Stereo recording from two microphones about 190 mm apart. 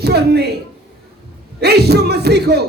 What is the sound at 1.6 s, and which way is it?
Speech, 60° right (ahead or behind).